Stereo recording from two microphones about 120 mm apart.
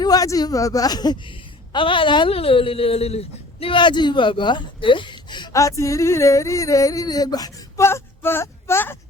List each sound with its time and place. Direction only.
0.0 s a woman's voice: 30° left (ahead or behind)
5.5 s a sound: 25° left (ahead or behind)
7.9 s speech: 20° left (ahead or behind)